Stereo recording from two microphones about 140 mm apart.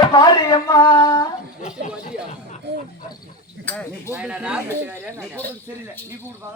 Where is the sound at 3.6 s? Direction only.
10° left (ahead or behind).